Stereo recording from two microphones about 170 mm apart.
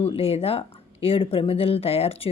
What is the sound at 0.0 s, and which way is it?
Speech, 35° left (ahead or behind).